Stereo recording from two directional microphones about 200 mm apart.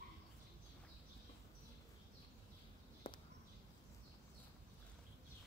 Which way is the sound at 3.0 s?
25° left (ahead or behind).